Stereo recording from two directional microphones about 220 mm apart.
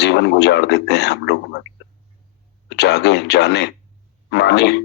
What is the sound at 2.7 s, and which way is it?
Speech, 50° left (ahead or behind).